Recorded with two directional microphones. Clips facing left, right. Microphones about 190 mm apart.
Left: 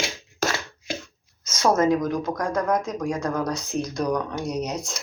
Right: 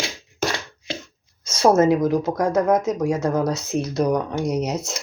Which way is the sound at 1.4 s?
30° right (ahead or behind).